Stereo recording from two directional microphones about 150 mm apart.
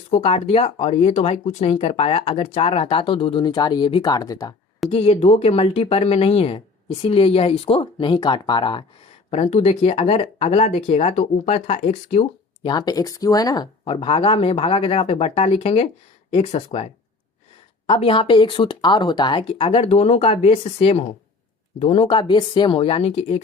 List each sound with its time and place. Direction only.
0.1 s speech: 40° left (ahead or behind); by 4.5 s 25° left (ahead or behind)
4.9 s speech: 45° left (ahead or behind)
9.3 s speech: 45° left (ahead or behind)
12.6 s speech: 25° left (ahead or behind)
13.8 s speech: 40° left (ahead or behind)